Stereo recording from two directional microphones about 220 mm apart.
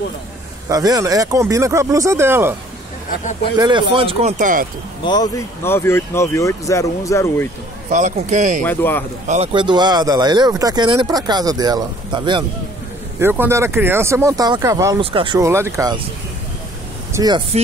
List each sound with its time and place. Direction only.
0.7 s speech: 15° right (ahead or behind)
3.5 s speech: 20° right (ahead or behind); by 4.6 s 35° right (ahead or behind)
5.0 s speech: 15° left (ahead or behind)
7.9 s speech: 35° right (ahead or behind)
8.6 s speech: 10° left (ahead or behind)
9.3 s speech: 25° right (ahead or behind)
13.2 s speech: 10° right (ahead or behind)
17.1 s speech: 15° right (ahead or behind)